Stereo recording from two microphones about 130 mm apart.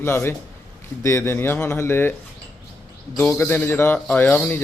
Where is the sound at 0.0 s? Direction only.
20° left (ahead or behind).